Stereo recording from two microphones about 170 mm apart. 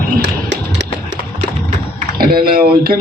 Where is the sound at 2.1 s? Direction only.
60° right (ahead or behind).